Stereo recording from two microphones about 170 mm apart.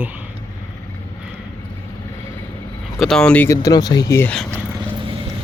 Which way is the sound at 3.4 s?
20° left (ahead or behind).